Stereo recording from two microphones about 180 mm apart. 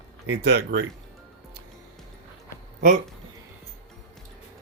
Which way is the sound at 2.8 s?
50° right (ahead or behind).